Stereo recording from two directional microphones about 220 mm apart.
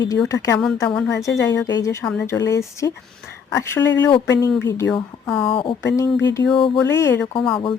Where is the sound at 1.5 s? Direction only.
15° left (ahead or behind).